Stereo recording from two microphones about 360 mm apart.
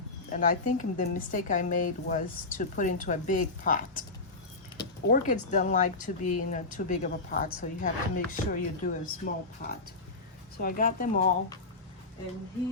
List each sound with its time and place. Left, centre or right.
0.3 s speech: left
5.0 s speech: left